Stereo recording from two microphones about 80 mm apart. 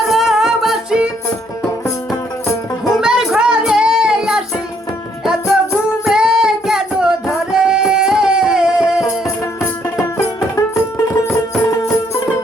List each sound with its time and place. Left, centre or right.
0.1 s music: centre
2.9 s music: centre
6.1 s singing: centre
9.2 s music: left